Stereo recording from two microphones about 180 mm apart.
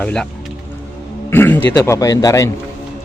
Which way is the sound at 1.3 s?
10° left (ahead or behind).